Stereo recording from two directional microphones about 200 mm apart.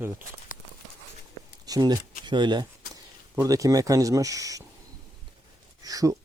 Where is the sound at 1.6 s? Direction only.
20° right (ahead or behind).